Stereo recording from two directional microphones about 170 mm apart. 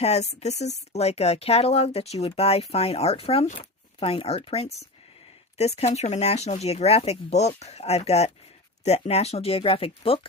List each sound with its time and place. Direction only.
0.0 s speech: 40° left (ahead or behind)